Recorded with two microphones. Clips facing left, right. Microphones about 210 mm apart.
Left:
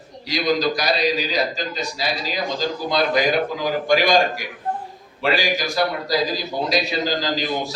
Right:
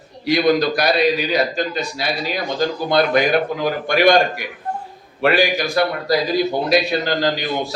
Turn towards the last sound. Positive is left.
turn(degrees=-60)  # may be behind; listen again after turning